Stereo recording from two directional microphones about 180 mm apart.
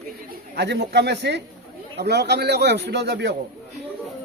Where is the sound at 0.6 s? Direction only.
70° right (ahead or behind).